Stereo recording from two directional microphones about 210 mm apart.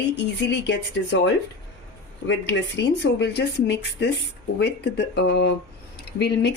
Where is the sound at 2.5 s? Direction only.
55° left (ahead or behind).